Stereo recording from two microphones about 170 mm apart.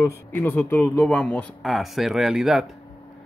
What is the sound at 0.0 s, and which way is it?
Speech, 10° left (ahead or behind).